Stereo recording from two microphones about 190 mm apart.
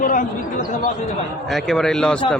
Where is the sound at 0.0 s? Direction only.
45° left (ahead or behind).